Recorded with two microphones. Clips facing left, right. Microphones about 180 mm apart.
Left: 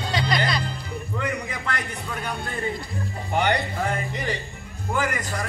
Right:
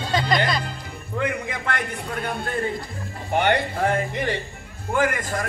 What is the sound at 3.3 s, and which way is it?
A man's voice, 50° right (ahead or behind).